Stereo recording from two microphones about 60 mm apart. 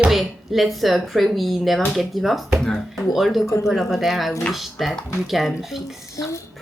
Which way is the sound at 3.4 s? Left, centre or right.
Left.